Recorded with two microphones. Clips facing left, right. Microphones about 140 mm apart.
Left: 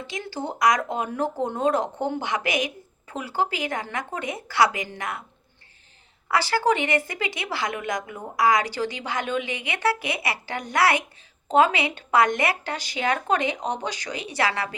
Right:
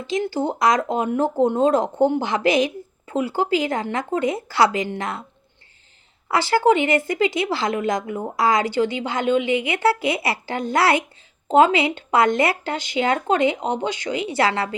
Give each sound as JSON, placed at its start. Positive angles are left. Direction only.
{"t": 0.1, "sound": "speech", "side_deg": -25}
{"t": 6.3, "sound": "speech", "side_deg": -25}